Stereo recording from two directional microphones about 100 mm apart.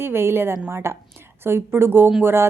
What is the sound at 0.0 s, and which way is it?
A woman's voice, 25° right (ahead or behind).